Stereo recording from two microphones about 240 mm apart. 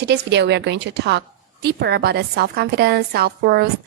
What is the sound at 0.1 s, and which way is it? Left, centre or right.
A woman's voice, right.